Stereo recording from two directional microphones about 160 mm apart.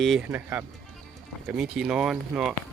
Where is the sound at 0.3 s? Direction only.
10° right (ahead or behind).